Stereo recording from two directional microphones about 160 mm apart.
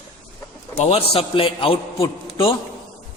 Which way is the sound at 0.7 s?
40° left (ahead or behind).